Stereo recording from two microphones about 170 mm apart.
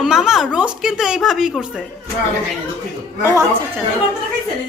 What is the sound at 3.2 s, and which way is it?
Speech, 15° right (ahead or behind).